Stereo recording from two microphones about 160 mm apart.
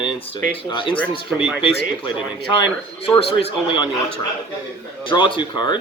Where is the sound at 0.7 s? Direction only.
30° left (ahead or behind).